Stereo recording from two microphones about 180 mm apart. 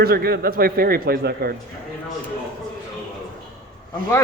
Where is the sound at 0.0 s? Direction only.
60° right (ahead or behind).